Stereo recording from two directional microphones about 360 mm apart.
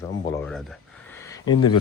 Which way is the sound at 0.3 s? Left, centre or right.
Centre.